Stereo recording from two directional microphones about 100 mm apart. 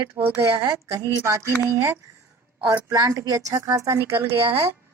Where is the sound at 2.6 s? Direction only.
40° right (ahead or behind).